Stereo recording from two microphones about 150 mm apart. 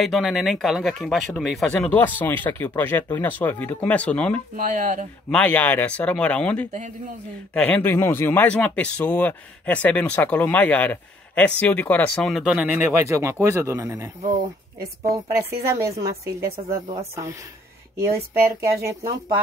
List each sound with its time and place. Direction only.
0.0 s speech: centre (ahead or behind)
4.6 s speech: 60° right (ahead or behind)
5.3 s speech: 10° left (ahead or behind); by 14.1 s 20° right (ahead or behind)
14.2 s speech: 60° right (ahead or behind)
15.0 s speech: 20° right (ahead or behind)
16.4 s a woman's voice: 90° right
17.9 s speech: 20° right (ahead or behind)